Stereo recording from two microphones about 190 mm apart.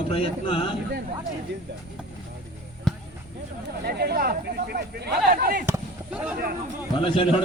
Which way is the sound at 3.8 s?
55° right (ahead or behind).